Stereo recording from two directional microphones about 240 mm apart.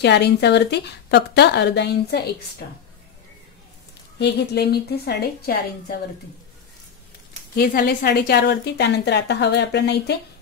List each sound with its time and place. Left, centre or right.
0.0 s a woman's voice: left
4.2 s a woman's voice: left
7.5 s a woman's voice: left